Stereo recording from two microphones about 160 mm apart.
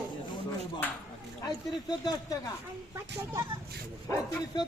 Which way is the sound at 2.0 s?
25° left (ahead or behind).